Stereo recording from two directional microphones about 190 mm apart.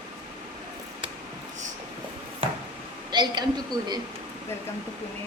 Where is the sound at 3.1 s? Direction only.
20° right (ahead or behind).